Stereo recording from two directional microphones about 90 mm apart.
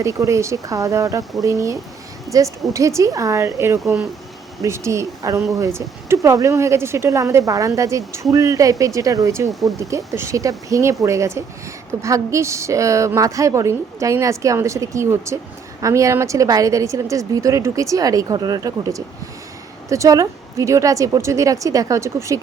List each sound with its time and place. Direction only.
0.0 s a woman's voice: 35° right (ahead or behind)
9.5 s speech: centre (ahead or behind)
9.7 s a woman's voice: 35° right (ahead or behind)